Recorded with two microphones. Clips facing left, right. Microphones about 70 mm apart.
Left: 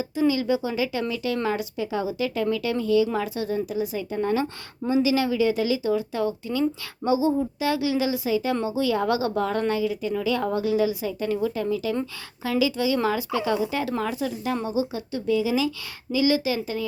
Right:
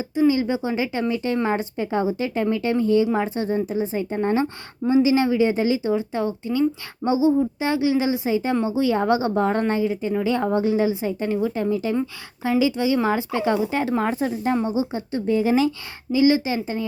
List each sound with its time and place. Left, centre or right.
0.2 s speech: right
16.1 s speech: right